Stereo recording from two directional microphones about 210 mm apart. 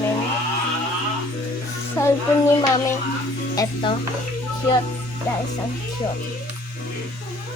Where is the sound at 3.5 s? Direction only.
20° left (ahead or behind).